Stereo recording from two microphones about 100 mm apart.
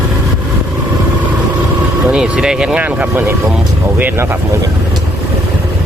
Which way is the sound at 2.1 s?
5° right (ahead or behind).